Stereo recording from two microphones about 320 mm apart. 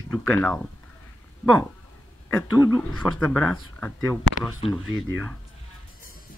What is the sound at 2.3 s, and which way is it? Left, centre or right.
Speech, centre.